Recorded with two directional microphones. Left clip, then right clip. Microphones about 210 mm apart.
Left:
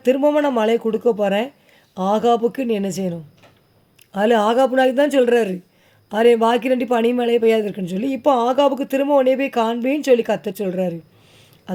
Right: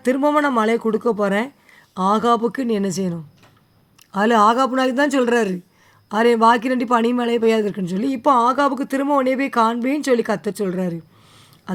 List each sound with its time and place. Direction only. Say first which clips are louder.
0.0 s speech: left 1 dB; 30° right (ahead or behind)